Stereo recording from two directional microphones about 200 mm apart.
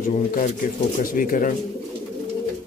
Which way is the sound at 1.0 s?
40° left (ahead or behind).